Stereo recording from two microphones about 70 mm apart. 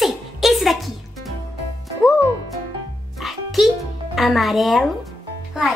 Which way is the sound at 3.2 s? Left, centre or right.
Centre.